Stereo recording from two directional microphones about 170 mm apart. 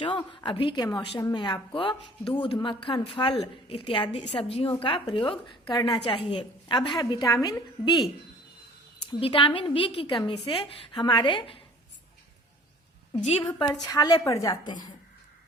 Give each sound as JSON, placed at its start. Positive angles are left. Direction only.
{"t": 0.0, "sound": "a woman's voice", "side_deg": 30}
{"t": 9.0, "sound": "a woman's voice", "side_deg": 30}
{"t": 13.6, "sound": "a woman's voice", "side_deg": 20}